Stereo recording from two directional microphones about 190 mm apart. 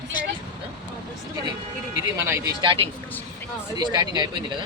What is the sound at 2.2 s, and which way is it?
Speech, 15° right (ahead or behind).